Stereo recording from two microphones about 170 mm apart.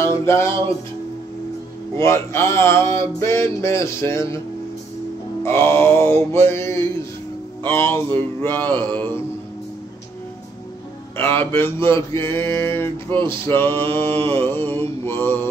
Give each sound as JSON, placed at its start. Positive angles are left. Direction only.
{"t": 0.0, "sound": "music", "side_deg": 15}
{"t": 2.0, "sound": "mantra", "side_deg": 15}
{"t": 5.4, "sound": "mantra", "side_deg": 15}
{"t": 11.1, "sound": "mantra", "side_deg": 10}